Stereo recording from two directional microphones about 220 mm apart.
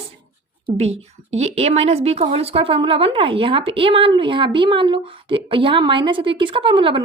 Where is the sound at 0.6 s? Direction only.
30° right (ahead or behind).